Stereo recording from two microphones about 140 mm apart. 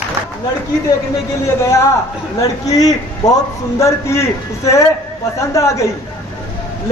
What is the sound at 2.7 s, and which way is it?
A man's voice, 25° left (ahead or behind).